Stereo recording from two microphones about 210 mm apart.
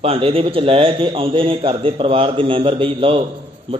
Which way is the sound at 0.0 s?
25° right (ahead or behind).